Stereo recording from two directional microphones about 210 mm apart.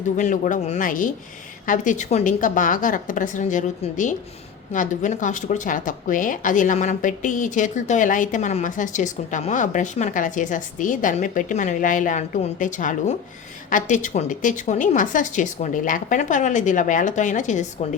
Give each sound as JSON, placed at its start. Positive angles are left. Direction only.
{"t": 0.2, "sound": "a woman's voice", "side_deg": 35}